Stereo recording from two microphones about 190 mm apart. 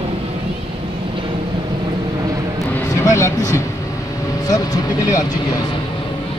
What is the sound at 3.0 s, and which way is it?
Speech, 15° left (ahead or behind).